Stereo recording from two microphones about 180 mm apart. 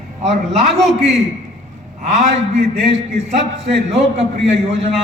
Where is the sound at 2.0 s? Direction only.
40° right (ahead or behind).